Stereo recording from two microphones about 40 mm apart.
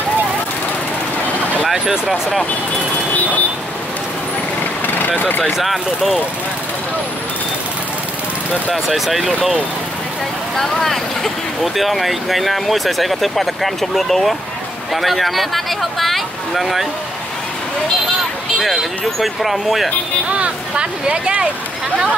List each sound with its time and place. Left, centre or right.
1.7 s speech: centre
3.1 s vehicle: left
4.8 s vehicle: left
5.6 s speech: centre
8.8 s speech: centre
10.5 s speech: centre
18.6 s speech: centre
20.2 s speech: right